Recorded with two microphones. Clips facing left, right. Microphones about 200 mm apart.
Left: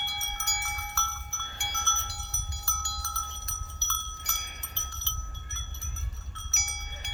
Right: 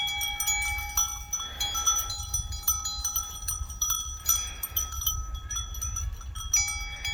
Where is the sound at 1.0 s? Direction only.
15° right (ahead or behind).